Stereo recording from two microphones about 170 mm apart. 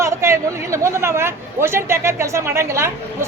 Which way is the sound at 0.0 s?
15° right (ahead or behind).